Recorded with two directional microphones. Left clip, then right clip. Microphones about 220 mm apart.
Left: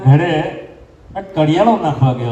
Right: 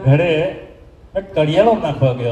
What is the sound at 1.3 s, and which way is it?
Speech, 45° right (ahead or behind).